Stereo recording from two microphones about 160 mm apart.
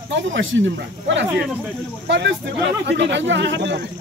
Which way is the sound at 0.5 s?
90° right.